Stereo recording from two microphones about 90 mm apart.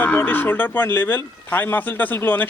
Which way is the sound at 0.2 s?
25° left (ahead or behind).